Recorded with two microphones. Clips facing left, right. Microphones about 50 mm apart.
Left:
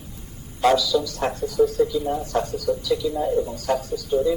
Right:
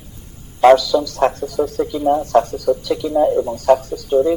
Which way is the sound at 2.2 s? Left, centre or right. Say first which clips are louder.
Right 8 dB; right.